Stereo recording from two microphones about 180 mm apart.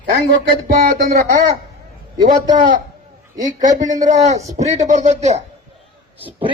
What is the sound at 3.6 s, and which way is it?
Speech, 45° right (ahead or behind).